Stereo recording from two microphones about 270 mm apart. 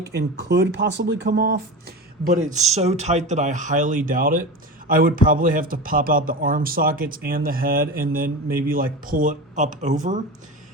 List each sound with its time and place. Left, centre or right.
0.1 s speech: right